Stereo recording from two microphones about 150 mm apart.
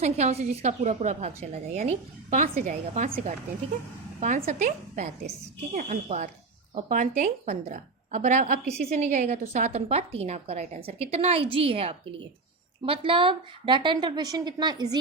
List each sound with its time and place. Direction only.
0.0 s a woman's voice: 45° right (ahead or behind)
1.9 s a woman's voice: 55° right (ahead or behind)
7.4 s a woman's voice: 45° right (ahead or behind)
9.0 s a woman's voice: 65° right (ahead or behind)
9.3 s a woman's voice: 50° right (ahead or behind); by 14.9 s 30° right (ahead or behind)